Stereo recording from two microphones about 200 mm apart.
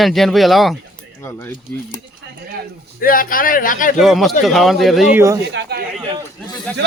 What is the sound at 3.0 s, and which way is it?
Speech, 45° left (ahead or behind).